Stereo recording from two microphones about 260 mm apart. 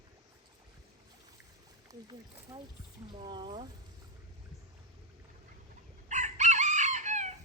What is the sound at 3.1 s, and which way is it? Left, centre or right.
Speech, centre.